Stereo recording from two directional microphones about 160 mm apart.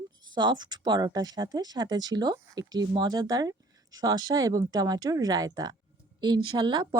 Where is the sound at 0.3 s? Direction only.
30° right (ahead or behind).